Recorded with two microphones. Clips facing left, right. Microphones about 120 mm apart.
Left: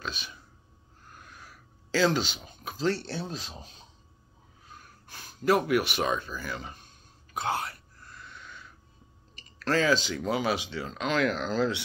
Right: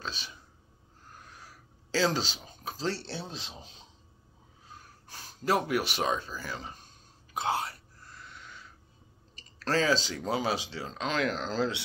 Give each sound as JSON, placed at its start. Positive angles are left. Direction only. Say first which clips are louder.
{"t": 0.0, "sound": "a sound", "louder": "left 2 dB", "side_deg": -30}
{"t": 3.1, "sound": "speech", "louder": "left 4 dB", "side_deg": 45}
{"t": 3.4, "sound": "speech", "louder": "left 2 dB", "side_deg": -20}
{"t": 4.7, "sound": "speech", "louder": "even", "side_deg": -30}
{"t": 7.3, "sound": "a sound", "louder": "even", "side_deg": -25}
{"t": 9.3, "sound": "speech", "louder": "left 2 dB", "side_deg": -30}